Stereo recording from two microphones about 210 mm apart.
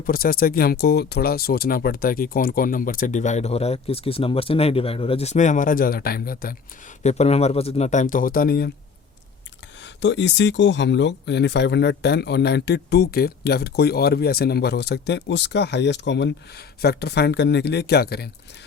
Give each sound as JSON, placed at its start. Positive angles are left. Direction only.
{"t": 0.0, "sound": "speech", "side_deg": 45}
{"t": 9.8, "sound": "speech", "side_deg": 60}